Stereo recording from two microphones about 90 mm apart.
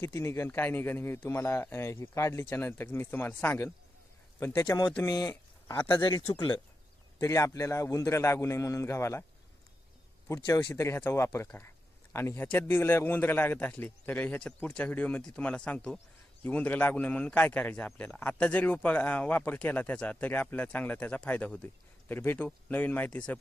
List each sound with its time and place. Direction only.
0.0 s speech: 30° left (ahead or behind)
7.2 s a man's voice: 35° left (ahead or behind)
10.8 s a man's voice: 30° left (ahead or behind)